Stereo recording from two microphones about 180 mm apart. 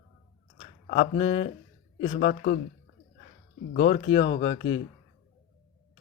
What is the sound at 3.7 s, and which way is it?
Speech, 35° left (ahead or behind).